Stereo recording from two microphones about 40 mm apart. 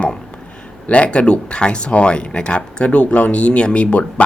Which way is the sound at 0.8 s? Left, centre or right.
Left.